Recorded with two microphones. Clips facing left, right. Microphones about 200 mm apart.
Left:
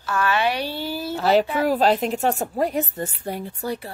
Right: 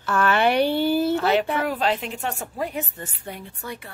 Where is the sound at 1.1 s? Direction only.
35° left (ahead or behind).